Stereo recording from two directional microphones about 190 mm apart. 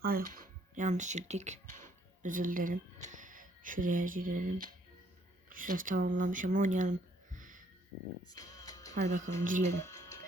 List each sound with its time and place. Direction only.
0.0 s speech: 50° right (ahead or behind)
7.3 s a sound: 45° right (ahead or behind)
8.3 s music: 20° left (ahead or behind)
9.0 s speech: 40° right (ahead or behind)
9.8 s music: 15° left (ahead or behind)